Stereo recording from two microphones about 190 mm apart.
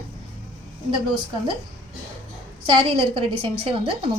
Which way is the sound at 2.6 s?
30° right (ahead or behind).